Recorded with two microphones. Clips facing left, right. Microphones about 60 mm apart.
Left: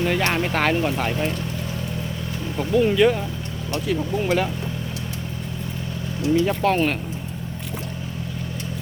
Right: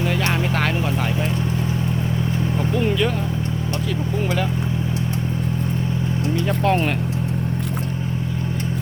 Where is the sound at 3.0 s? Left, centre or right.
Centre.